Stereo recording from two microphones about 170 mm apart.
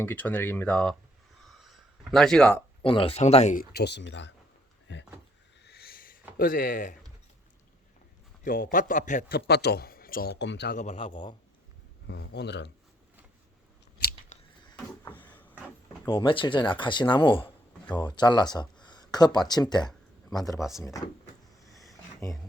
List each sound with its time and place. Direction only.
0.0 s speech: 10° left (ahead or behind)
1.5 s gasp: centre (ahead or behind)
2.8 s speech: 30° left (ahead or behind)
3.6 s speech: 70° left (ahead or behind); by 5.0 s 90° left
5.6 s owl: 70° left (ahead or behind)
6.3 s a man's voice: 55° left (ahead or behind)
8.4 s a man's voice: 55° left (ahead or behind)
9.5 s speech: 70° left (ahead or behind); by 10.8 s 90° left
10.8 s a man's voice: 45° left (ahead or behind)
12.0 s speech: 85° left
14.3 s a sound: 45° left (ahead or behind)
15.3 s vehicle: 10° left (ahead or behind)
16.0 s speech: 30° left (ahead or behind)